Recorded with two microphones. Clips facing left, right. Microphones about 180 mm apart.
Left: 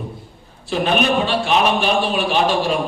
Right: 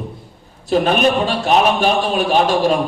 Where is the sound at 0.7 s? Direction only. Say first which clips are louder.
Right 3 dB; 45° right (ahead or behind).